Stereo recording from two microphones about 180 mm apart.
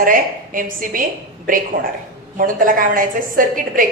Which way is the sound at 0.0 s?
50° right (ahead or behind).